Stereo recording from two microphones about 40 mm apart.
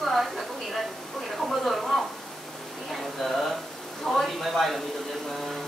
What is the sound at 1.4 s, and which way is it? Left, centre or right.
Speech, centre.